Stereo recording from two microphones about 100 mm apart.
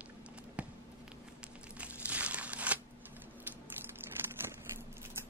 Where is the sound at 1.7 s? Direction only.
15° right (ahead or behind).